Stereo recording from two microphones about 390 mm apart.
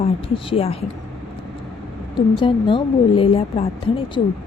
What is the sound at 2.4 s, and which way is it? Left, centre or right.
A woman's voice, centre.